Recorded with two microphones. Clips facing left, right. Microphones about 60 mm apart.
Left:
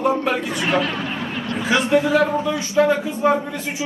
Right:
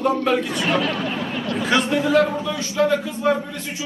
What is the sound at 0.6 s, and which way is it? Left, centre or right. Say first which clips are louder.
A man's voice: even; centre.